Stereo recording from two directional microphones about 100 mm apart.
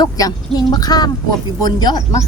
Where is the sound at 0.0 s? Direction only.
40° left (ahead or behind).